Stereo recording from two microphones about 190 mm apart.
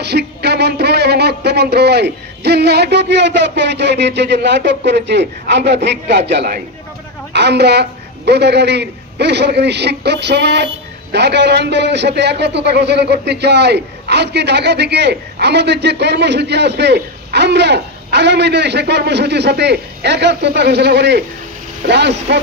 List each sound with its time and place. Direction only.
0.0 s a man's voice: 60° right (ahead or behind)